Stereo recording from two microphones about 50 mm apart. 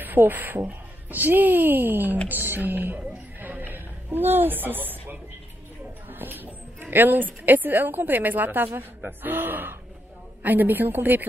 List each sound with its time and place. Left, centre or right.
0.0 s speech: right
2.2 s a sound: right
6.0 s a woman's voice: right